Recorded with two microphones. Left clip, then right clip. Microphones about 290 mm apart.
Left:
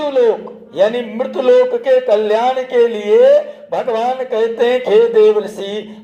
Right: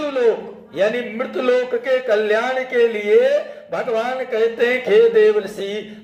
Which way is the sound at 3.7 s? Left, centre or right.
Centre.